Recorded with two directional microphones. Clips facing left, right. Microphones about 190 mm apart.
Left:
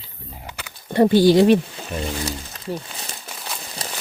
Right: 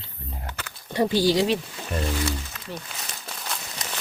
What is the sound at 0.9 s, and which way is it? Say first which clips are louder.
Speech: left 7 dB; 55° left (ahead or behind).